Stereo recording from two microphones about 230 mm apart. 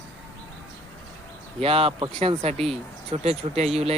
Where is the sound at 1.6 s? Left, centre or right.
Right.